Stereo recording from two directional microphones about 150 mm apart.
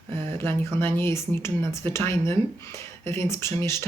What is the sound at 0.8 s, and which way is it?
Speech, 15° left (ahead or behind).